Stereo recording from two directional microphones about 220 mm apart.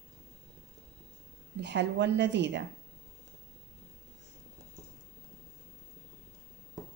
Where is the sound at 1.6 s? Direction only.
50° right (ahead or behind).